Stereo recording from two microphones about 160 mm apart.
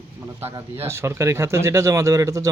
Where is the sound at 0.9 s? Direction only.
15° right (ahead or behind).